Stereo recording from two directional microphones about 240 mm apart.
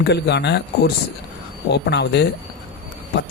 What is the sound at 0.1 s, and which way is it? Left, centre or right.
Speech, left.